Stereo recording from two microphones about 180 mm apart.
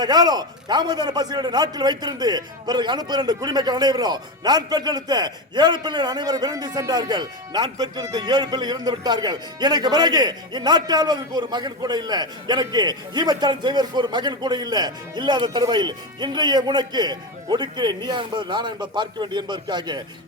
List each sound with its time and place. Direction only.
0.0 s a man's voice: 20° right (ahead or behind)